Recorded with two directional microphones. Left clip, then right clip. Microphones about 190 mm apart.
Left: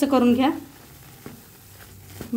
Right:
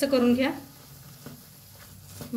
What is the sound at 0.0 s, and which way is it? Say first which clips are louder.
Speech: left 4 dB; 45° left (ahead or behind).